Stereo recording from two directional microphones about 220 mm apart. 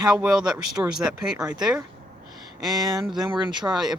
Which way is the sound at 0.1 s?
5° right (ahead or behind).